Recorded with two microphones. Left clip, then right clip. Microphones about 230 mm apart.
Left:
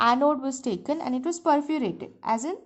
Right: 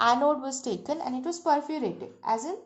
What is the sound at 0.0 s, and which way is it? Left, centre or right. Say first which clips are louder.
A woman's voice: left 2 dB; left.